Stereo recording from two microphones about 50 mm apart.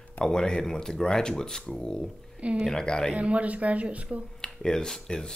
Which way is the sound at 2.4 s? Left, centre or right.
Right.